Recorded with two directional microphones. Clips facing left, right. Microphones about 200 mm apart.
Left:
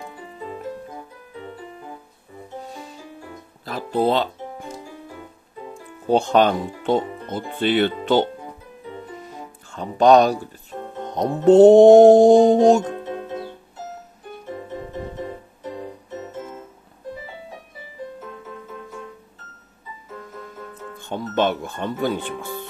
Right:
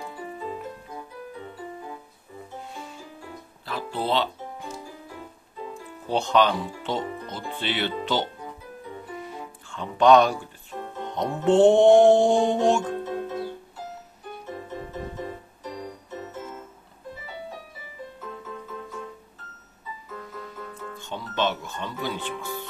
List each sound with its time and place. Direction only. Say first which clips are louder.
2.6 s music: left 3 dB; 40° left (ahead or behind)
6.0 s speech: left 5 dB; 50° left (ahead or behind)
9.7 s speech: left 3 dB; 40° left (ahead or behind)
11.1 s music: left 7 dB; 40° left (ahead or behind)
21.0 s music: left 6 dB; 50° left (ahead or behind)